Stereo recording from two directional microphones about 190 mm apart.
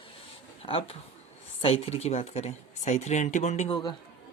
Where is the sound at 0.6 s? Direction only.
30° left (ahead or behind).